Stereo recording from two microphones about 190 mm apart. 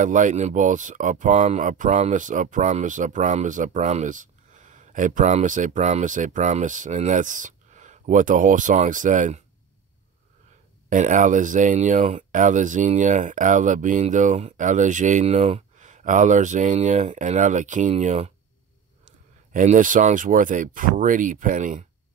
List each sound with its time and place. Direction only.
0.0 s speech: 40° right (ahead or behind)
10.9 s speech: 40° right (ahead or behind)
19.5 s speech: 45° right (ahead or behind)